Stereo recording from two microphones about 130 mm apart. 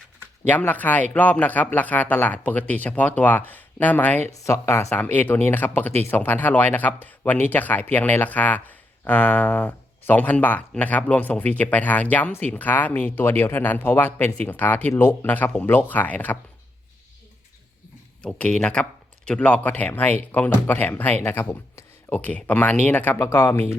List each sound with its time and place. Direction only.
0.4 s speech: 15° left (ahead or behind)
18.2 s speech: 10° left (ahead or behind)